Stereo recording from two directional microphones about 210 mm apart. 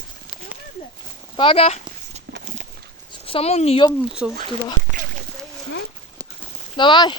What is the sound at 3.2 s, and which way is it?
Speech, 30° left (ahead or behind).